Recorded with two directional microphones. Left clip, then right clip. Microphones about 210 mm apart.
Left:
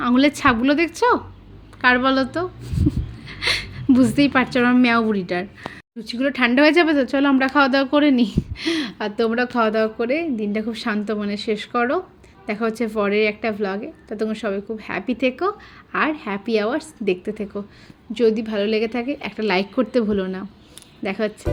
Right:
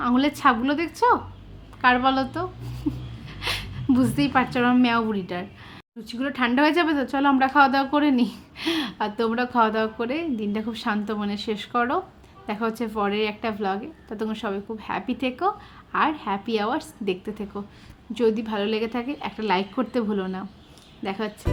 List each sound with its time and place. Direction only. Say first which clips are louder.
0.0 s a woman's voice: left 3 dB; 20° left (ahead or behind)